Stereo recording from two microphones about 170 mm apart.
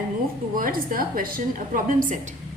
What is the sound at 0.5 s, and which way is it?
A woman's voice, 55° right (ahead or behind).